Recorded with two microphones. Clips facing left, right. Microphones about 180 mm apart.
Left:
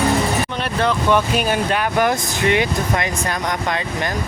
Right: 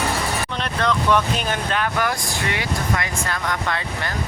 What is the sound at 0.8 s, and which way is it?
Speech, 5° left (ahead or behind).